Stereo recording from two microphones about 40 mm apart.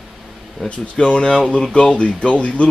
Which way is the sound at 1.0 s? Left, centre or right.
Left.